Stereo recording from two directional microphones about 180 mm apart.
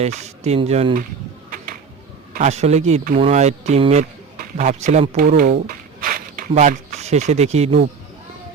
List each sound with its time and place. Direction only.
0.0 s speech: 40° right (ahead or behind)
2.3 s a man's voice: 40° right (ahead or behind)
5.4 s a sound: 50° right (ahead or behind)